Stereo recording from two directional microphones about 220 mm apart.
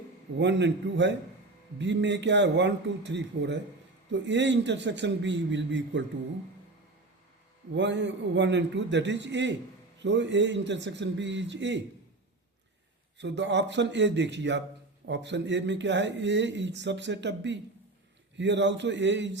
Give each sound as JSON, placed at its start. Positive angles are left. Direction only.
{"t": 0.3, "sound": "speech", "side_deg": -55}
{"t": 7.8, "sound": "a man's voice", "side_deg": -55}
{"t": 13.1, "sound": "a man's voice", "side_deg": -55}